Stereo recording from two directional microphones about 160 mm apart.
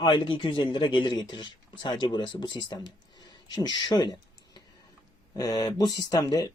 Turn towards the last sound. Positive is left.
turn(degrees=25)  # may be behind; listen again after turning